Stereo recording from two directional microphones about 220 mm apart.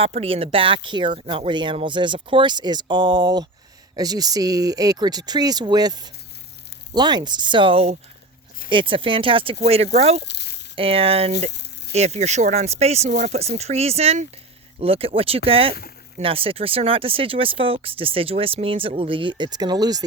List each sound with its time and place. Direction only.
0.0 s speech: 25° right (ahead or behind)
10.2 s a sound: 50° left (ahead or behind)
10.8 s speech: 25° right (ahead or behind)